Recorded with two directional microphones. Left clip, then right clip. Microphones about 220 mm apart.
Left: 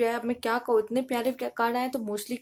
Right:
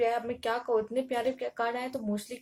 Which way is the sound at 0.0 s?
45° left (ahead or behind).